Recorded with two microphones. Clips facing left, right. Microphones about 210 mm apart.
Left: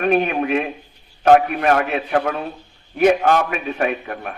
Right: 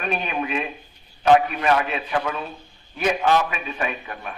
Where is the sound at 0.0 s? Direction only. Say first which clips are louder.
Left 8 dB; 55° left (ahead or behind).